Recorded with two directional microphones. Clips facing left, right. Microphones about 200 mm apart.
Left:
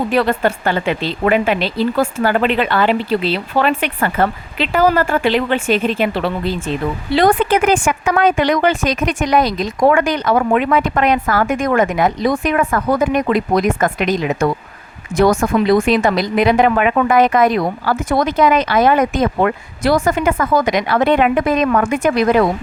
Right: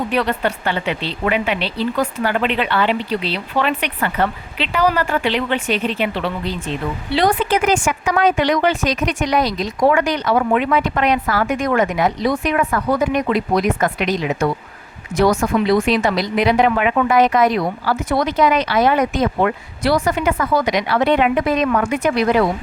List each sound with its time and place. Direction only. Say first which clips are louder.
0.1 s speech: left 4 dB; 40° left (ahead or behind)
7.1 s speech: left 4 dB; 50° left (ahead or behind)